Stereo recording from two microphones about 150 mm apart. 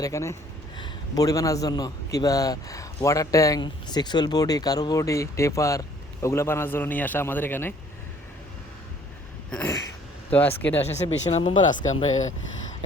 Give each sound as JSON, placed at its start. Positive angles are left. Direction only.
{"t": 0.0, "sound": "a man's voice", "side_deg": 20}
{"t": 9.5, "sound": "a sound", "side_deg": 10}
{"t": 10.3, "sound": "a man's voice", "side_deg": 10}
{"t": 10.9, "sound": "speech", "side_deg": 45}